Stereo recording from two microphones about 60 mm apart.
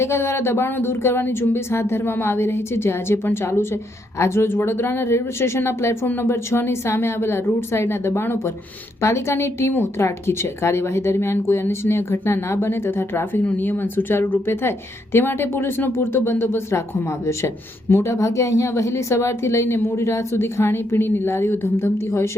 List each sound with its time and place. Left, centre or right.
0.0 s speech: left
13.4 s a woman's voice: left
18.0 s speech: left